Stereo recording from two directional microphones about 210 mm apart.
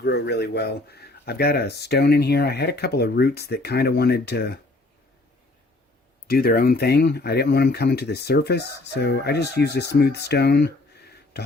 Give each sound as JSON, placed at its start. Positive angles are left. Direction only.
{"t": 0.0, "sound": "speech", "side_deg": 50}
{"t": 6.2, "sound": "speech", "side_deg": 45}